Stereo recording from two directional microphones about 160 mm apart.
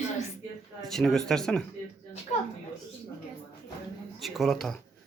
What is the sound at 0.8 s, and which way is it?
Speech, centre (ahead or behind).